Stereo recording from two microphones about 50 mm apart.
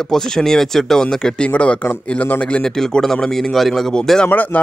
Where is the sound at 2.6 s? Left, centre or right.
Centre.